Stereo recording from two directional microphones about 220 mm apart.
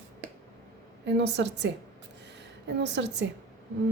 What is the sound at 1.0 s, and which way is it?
Speech, 55° right (ahead or behind).